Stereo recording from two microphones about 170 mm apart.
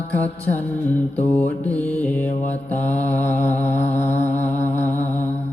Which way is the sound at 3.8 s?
40° left (ahead or behind).